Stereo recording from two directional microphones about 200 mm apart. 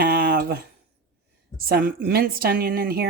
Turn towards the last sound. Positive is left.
turn(degrees=-50)  # may be behind; listen again after turning